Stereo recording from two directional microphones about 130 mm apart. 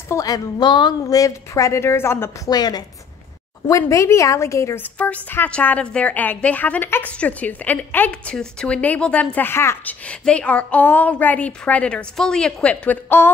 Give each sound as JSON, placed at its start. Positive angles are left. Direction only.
{"t": 0.1, "sound": "a woman's voice", "side_deg": 30}
{"t": 2.5, "sound": "a woman's voice", "side_deg": 30}